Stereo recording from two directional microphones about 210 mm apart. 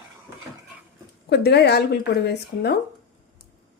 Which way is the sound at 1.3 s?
50° left (ahead or behind).